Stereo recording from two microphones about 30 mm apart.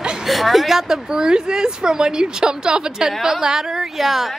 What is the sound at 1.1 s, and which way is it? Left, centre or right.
A woman's voice, right.